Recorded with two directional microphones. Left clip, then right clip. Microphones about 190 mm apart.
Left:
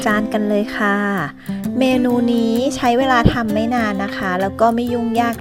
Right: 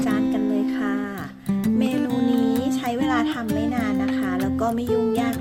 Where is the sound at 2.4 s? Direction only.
40° left (ahead or behind).